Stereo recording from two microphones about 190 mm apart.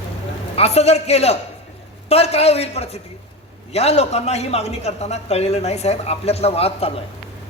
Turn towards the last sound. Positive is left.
turn(degrees=30)  # may be behind; listen again after turning